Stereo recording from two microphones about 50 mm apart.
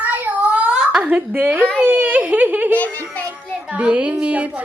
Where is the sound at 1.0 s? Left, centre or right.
Right.